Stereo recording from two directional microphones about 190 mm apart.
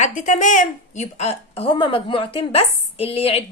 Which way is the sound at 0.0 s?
40° left (ahead or behind).